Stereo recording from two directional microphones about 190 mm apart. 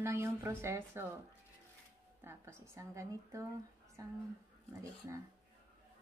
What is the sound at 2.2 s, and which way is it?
Speech, 15° right (ahead or behind).